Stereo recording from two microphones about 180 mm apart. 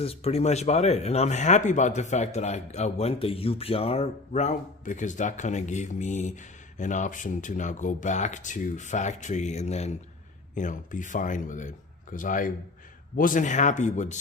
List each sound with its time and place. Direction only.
0.0 s speech: 35° left (ahead or behind)